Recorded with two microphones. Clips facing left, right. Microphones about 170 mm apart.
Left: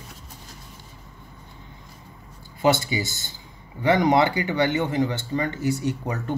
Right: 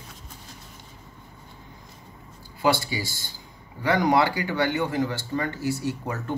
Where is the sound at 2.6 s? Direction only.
20° left (ahead or behind).